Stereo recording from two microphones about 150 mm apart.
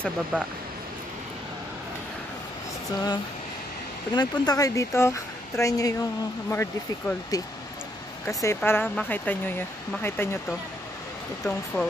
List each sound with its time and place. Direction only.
0.3 s speech: 10° left (ahead or behind)
4.1 s speech: 25° left (ahead or behind)
8.5 s speech: 10° left (ahead or behind)
11.4 s speech: 5° left (ahead or behind)